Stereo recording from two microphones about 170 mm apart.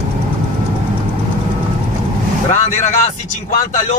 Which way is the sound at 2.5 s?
45° left (ahead or behind).